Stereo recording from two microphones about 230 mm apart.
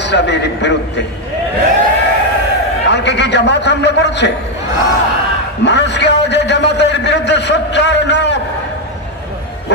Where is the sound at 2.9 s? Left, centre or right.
Left.